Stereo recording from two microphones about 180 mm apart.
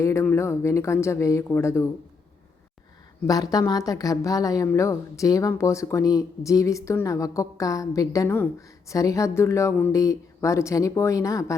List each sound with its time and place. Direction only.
0.0 s speech: 15° left (ahead or behind)
3.2 s speech: 20° left (ahead or behind)